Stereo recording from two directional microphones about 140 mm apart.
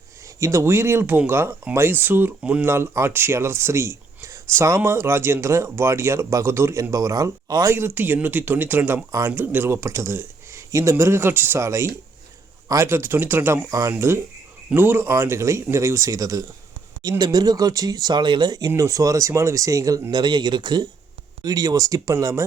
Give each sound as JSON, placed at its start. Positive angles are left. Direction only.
{"t": 0.3, "sound": "speech", "side_deg": -20}